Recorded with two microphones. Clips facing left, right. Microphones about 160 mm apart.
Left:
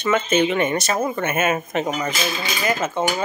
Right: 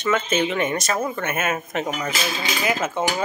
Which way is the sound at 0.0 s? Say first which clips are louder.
Left 3 dB; centre (ahead or behind).